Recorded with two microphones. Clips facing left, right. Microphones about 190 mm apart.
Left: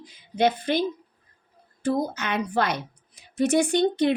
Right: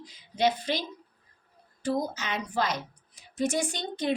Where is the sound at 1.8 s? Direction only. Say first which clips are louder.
Left 4 dB; 55° left (ahead or behind).